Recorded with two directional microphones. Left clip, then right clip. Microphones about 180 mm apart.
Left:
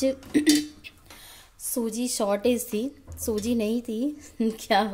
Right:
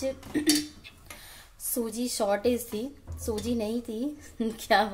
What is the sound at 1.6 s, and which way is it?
A woman's voice, 20° left (ahead or behind).